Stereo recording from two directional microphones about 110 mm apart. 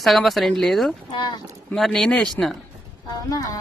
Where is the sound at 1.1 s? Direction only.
40° left (ahead or behind).